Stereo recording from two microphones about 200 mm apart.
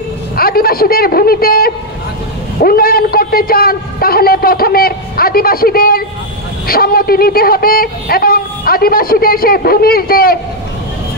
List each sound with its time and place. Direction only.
0.4 s speech: 50° left (ahead or behind)